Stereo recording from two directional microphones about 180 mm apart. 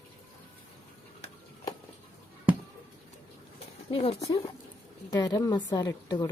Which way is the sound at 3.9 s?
30° left (ahead or behind).